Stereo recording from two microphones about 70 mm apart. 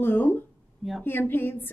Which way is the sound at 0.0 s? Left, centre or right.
Left.